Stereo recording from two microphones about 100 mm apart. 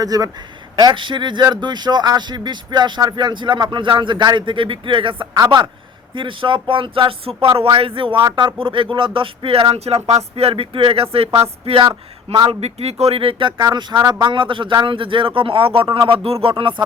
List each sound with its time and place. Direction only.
0.0 s speech: 40° right (ahead or behind)
0.8 s speech: 50° right (ahead or behind)
6.1 s speech: 55° right (ahead or behind); by 11.9 s 75° right (ahead or behind)
11.9 s speech: 45° right (ahead or behind)
12.5 s speech: 90° right; by 13.5 s 65° right (ahead or behind)
13.6 s speech: 45° right (ahead or behind)